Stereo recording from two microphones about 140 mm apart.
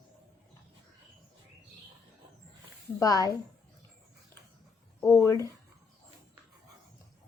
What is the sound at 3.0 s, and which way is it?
Speech, 25° left (ahead or behind).